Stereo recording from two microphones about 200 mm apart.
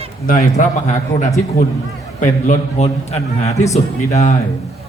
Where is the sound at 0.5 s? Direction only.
35° left (ahead or behind).